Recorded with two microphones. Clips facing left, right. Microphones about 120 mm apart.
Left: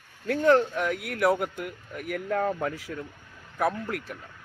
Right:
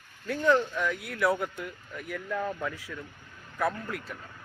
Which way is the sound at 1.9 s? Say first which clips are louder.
Left 5 dB; 55° left (ahead or behind).